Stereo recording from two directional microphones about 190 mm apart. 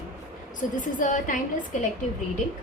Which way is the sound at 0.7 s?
45° left (ahead or behind).